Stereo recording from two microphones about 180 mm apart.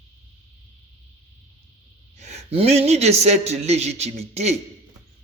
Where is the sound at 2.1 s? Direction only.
40° right (ahead or behind).